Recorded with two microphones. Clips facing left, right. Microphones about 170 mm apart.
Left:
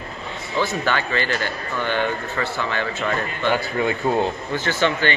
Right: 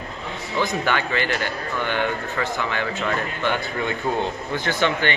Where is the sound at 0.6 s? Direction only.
15° right (ahead or behind).